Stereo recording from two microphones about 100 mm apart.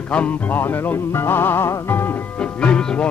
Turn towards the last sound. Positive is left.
turn(degrees=10)  # may be behind; listen again after turning